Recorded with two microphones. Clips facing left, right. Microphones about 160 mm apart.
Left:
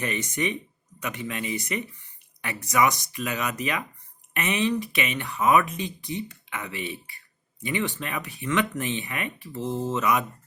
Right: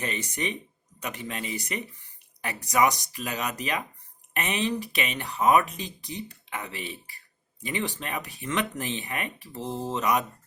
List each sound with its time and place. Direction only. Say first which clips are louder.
0.0 s speech: left 3 dB; 30° right (ahead or behind)